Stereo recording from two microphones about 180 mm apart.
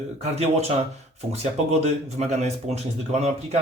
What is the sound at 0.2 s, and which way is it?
Speech, 35° right (ahead or behind).